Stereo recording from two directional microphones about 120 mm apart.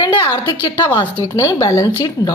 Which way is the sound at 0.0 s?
40° left (ahead or behind).